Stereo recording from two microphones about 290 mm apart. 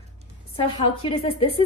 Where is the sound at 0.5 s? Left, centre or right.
Centre.